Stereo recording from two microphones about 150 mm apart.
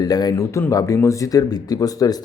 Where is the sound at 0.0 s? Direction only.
25° left (ahead or behind).